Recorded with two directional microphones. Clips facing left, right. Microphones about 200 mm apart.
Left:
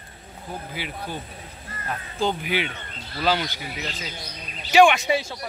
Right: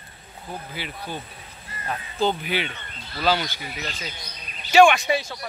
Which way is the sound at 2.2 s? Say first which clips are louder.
Right 1 dB; 10° left (ahead or behind).